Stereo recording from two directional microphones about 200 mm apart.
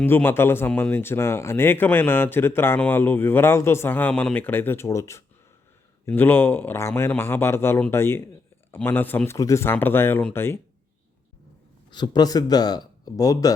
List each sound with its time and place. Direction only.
0.0 s speech: 10° left (ahead or behind)
11.9 s speech: 20° left (ahead or behind)